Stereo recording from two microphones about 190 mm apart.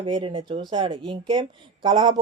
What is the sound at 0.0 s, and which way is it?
Speech, 25° right (ahead or behind).